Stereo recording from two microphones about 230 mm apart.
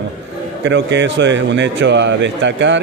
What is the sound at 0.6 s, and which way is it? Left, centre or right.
Speech, right.